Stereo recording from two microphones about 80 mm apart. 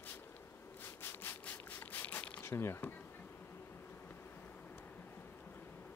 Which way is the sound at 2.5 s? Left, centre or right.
Left.